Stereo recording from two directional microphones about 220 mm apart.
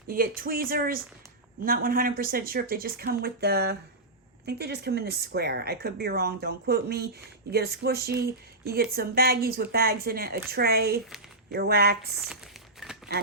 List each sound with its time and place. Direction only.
0.1 s a woman's voice: 40° right (ahead or behind)